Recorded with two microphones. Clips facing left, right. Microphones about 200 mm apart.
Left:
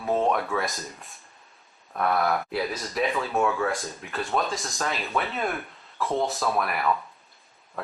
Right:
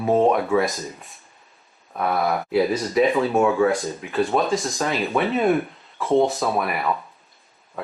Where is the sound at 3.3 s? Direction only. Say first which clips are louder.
Right 5 dB; 15° right (ahead or behind).